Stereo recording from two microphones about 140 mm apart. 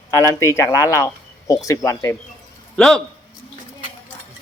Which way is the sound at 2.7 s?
5° left (ahead or behind).